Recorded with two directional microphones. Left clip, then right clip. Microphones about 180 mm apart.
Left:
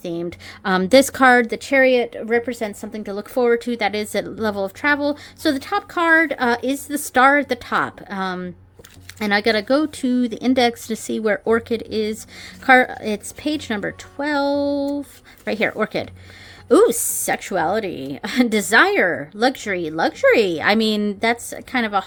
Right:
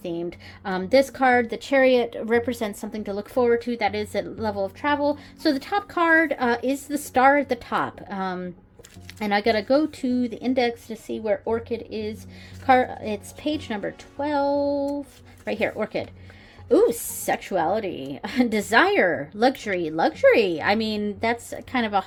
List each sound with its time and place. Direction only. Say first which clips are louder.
0.0 s a woman's voice: left 3 dB; 25° left (ahead or behind)
0.6 s a woman's voice: left 6 dB; 45° left (ahead or behind)
5.4 s a woman's voice: left 4 dB; 15° left (ahead or behind); by 10.9 s 35° left (ahead or behind)
10.9 s a woman's voice: left 5 dB; 50° left (ahead or behind); by 16.0 s 25° left (ahead or behind)
16.6 s a woman's voice: left 5 dB; 40° left (ahead or behind)
16.9 s a woman's voice: left 3 dB; 20° left (ahead or behind)
21.7 s a woman's voice: left 3 dB; 10° left (ahead or behind)